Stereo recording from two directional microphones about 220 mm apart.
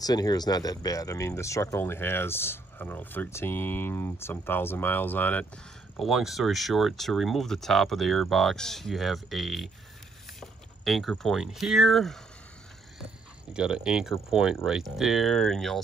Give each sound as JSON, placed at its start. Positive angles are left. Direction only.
{"t": 0.0, "sound": "speech", "side_deg": 15}
{"t": 13.5, "sound": "speech", "side_deg": -5}